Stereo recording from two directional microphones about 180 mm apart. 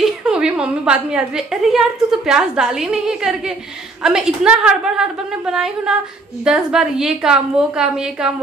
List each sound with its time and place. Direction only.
0.0 s a woman's voice: 5° right (ahead or behind)